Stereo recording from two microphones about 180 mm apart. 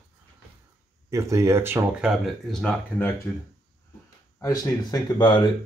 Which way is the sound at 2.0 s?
Centre (ahead or behind).